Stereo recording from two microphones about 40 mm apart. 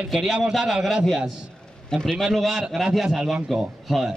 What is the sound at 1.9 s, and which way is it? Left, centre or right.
Speech, centre.